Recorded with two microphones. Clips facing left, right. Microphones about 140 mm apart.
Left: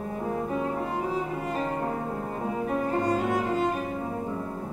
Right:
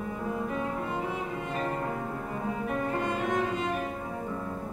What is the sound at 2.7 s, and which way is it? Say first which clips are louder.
Music: left 5 dB; 35° left (ahead or behind).